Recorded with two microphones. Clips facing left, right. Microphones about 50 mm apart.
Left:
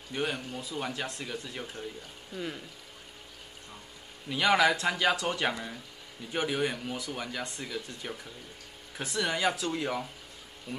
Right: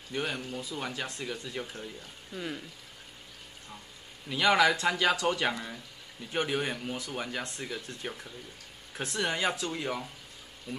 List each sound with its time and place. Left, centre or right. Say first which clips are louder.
0.1 s speech: left 1 dB; centre
4.3 s speech: even; centre
8.0 s speech: right 1 dB; centre